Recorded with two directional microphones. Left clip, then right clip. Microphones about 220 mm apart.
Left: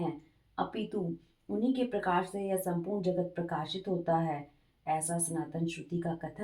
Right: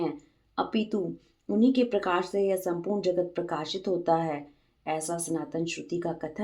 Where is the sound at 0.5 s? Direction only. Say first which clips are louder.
Right 6 dB; 40° right (ahead or behind).